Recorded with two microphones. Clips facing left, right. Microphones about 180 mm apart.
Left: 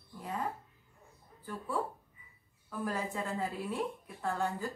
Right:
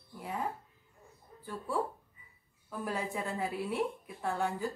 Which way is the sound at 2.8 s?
15° right (ahead or behind).